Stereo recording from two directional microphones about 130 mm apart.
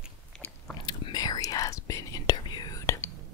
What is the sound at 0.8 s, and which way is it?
Whispering, 30° left (ahead or behind).